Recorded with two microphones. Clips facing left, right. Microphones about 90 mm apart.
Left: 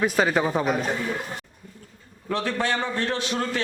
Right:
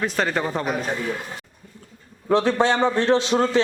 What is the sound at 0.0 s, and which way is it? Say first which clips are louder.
Speech: left 2 dB; 5° left (ahead or behind).